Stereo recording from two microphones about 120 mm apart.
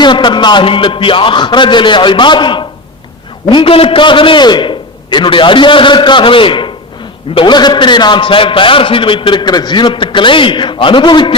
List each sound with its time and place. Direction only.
0.0 s a man's voice: 40° left (ahead or behind)